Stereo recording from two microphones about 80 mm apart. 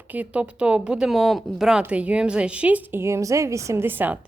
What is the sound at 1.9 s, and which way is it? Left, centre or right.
A woman's voice, centre.